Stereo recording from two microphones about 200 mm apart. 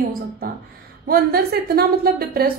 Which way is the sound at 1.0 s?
50° right (ahead or behind).